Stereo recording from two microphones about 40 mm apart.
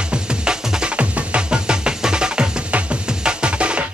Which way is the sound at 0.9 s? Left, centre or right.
Right.